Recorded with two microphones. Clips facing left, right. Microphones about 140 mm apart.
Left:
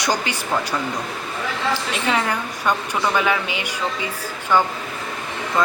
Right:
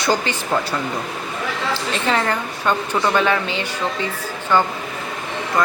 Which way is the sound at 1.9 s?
10° left (ahead or behind).